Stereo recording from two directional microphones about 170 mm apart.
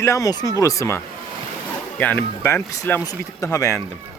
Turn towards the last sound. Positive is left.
turn(degrees=15)  # may be behind; listen again after turning